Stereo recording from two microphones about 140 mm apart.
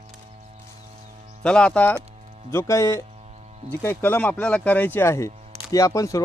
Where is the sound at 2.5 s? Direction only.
20° left (ahead or behind).